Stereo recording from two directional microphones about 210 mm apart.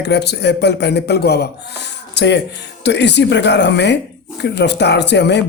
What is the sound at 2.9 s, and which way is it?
Speech, 55° left (ahead or behind).